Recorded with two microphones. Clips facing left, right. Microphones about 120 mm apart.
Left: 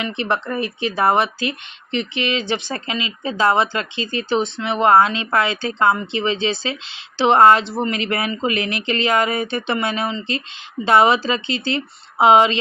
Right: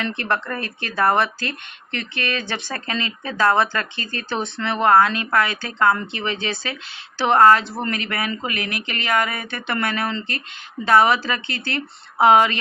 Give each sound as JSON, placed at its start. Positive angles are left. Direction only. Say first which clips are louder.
{"t": 0.0, "sound": "speech", "louder": "left 2 dB", "side_deg": 20}
{"t": 4.4, "sound": "speech", "louder": "left 5 dB", "side_deg": 90}
{"t": 4.6, "sound": "speech", "louder": "left 1 dB", "side_deg": 20}